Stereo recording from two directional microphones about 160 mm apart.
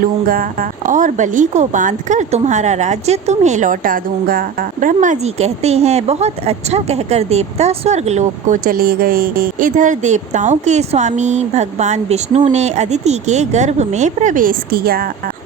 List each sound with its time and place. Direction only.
0.3 s speech: 60° right (ahead or behind)